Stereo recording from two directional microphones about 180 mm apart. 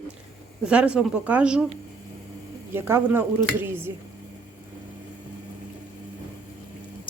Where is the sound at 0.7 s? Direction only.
5° right (ahead or behind).